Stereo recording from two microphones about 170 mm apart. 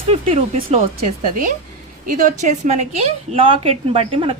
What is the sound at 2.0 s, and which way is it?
Speech, 50° right (ahead or behind).